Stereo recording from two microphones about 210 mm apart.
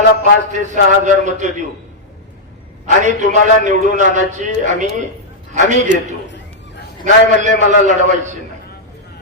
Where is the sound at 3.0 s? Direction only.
35° right (ahead or behind).